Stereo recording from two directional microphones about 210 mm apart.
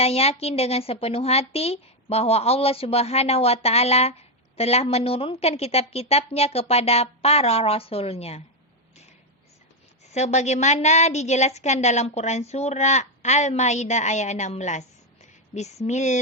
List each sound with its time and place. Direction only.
0.0 s a woman's voice: 30° left (ahead or behind)
10.1 s a woman's voice: 30° left (ahead or behind)